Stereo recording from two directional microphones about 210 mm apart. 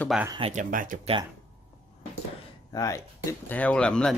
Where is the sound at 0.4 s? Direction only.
35° right (ahead or behind).